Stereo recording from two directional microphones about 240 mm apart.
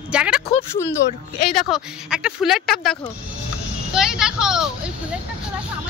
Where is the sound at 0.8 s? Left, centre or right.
Left.